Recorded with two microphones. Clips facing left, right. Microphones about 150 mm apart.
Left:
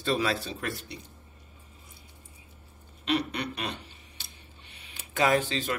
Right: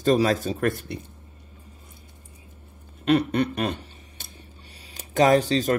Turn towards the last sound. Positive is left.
turn(degrees=-40)  # may be behind; listen again after turning